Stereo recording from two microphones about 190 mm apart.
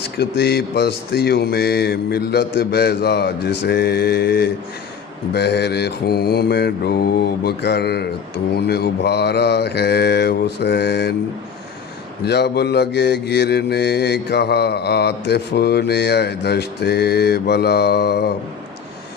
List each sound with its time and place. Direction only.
0.2 s mantra: 60° left (ahead or behind)
12.2 s mantra: 60° left (ahead or behind)